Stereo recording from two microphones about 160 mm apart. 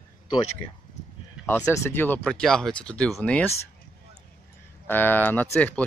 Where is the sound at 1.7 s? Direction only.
15° left (ahead or behind).